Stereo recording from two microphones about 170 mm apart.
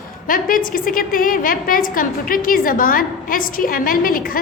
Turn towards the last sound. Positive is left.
turn(degrees=55)  # may be behind; listen again after turning